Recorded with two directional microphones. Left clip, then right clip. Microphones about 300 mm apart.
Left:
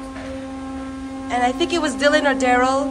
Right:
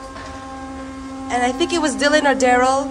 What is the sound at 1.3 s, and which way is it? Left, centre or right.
A woman's voice, centre.